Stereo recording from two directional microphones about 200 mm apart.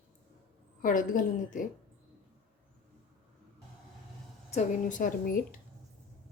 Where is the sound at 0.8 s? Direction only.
40° left (ahead or behind).